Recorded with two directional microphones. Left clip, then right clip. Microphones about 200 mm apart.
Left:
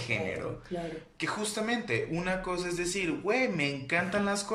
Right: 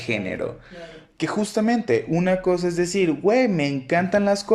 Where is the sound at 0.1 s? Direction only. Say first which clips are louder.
Right 6 dB; 45° right (ahead or behind).